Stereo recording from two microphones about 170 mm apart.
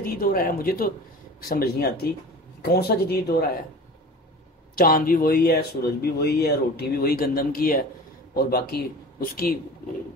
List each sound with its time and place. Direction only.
0.0 s speech: 55° left (ahead or behind)
4.7 s speech: 55° left (ahead or behind)